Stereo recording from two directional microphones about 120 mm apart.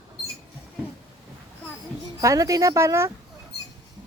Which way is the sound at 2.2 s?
30° right (ahead or behind).